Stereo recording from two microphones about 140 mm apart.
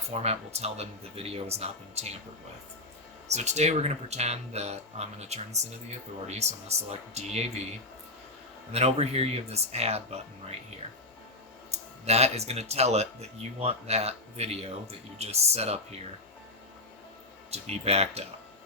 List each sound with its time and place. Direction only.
0.1 s speech: 50° right (ahead or behind)
3.2 s speech: 55° right (ahead or behind)
8.7 s speech: 50° right (ahead or behind)
11.7 s speech: 50° right (ahead or behind)
17.5 s speech: 50° right (ahead or behind)